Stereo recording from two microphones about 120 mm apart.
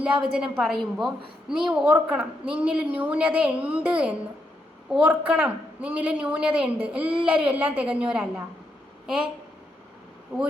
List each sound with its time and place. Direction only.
0.0 s a woman's voice: 10° right (ahead or behind)
10.3 s a woman's voice: 15° right (ahead or behind)